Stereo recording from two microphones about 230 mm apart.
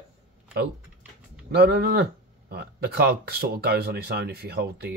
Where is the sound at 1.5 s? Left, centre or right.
Right.